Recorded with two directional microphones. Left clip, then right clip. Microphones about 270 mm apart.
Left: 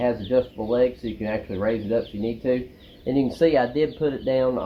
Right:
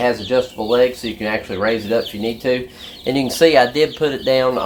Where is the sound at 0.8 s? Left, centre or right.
Centre.